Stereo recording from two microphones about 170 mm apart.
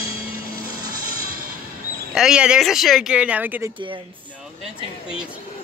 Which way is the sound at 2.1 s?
5° right (ahead or behind).